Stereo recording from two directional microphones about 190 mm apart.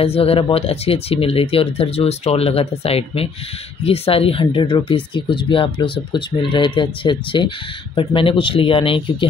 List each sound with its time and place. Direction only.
0.0 s speech: 30° left (ahead or behind)